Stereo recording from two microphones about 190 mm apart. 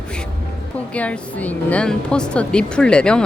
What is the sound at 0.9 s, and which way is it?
A woman's voice, 5° left (ahead or behind).